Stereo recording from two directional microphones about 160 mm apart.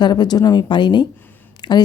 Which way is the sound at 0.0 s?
25° left (ahead or behind).